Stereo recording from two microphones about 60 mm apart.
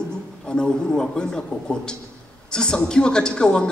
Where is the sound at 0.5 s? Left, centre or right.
Centre.